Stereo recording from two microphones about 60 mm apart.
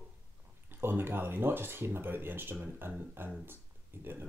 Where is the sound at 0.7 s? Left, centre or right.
Right.